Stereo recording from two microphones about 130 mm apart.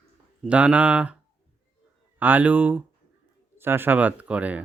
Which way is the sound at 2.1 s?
15° right (ahead or behind).